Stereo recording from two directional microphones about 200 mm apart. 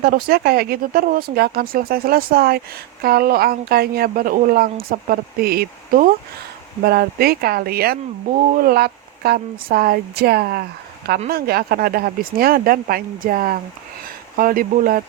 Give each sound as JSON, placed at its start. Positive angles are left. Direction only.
{"t": 0.0, "sound": "speech", "side_deg": -50}